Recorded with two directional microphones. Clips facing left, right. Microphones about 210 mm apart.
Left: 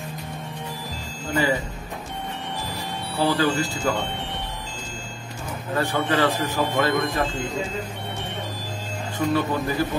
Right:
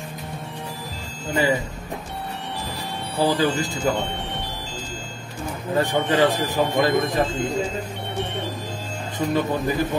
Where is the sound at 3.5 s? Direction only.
40° left (ahead or behind).